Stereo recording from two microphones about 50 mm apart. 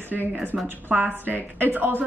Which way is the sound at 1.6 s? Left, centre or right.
Right.